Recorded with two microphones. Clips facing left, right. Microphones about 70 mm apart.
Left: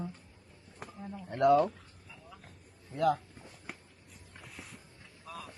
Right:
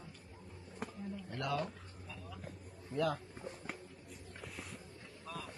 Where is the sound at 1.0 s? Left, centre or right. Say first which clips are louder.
Left 15 dB; left.